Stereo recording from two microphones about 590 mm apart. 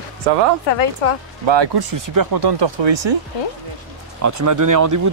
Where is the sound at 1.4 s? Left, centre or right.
Right.